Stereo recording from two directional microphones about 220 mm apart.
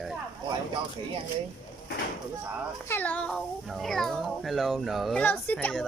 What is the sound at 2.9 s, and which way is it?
Speech, 5° left (ahead or behind).